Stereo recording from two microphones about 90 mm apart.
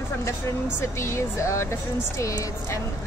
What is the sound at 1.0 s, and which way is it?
A woman's voice, 30° left (ahead or behind).